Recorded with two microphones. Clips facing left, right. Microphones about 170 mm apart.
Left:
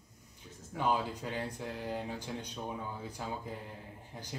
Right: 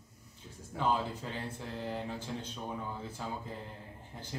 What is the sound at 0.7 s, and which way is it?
Speech, 15° left (ahead or behind).